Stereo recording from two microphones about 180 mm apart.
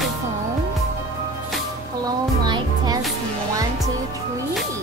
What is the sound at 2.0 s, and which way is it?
Music, 25° right (ahead or behind).